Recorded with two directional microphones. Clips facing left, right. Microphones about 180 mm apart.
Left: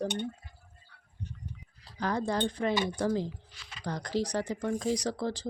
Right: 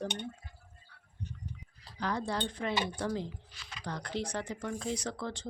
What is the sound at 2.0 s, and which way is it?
Speech, 45° left (ahead or behind).